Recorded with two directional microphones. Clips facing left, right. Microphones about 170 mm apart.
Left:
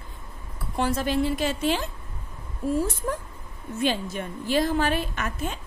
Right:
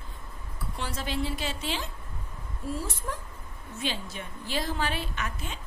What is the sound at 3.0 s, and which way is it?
A woman's voice, 50° left (ahead or behind).